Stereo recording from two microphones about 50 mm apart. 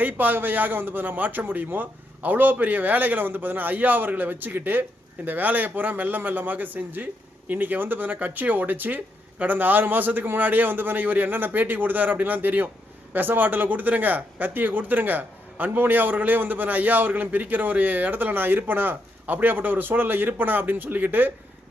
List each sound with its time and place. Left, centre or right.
0.0 s a man's voice: right